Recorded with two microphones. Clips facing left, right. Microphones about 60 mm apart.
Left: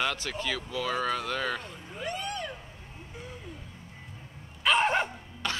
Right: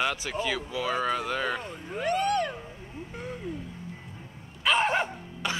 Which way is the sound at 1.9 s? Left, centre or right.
Right.